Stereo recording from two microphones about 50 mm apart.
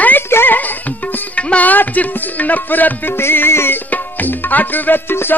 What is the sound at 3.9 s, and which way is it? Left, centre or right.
Tabla, left.